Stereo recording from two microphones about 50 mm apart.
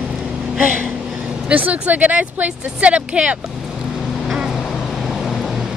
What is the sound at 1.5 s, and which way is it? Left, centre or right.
Speech, right.